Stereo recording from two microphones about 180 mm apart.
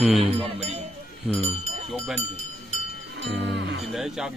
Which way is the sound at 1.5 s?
35° right (ahead or behind).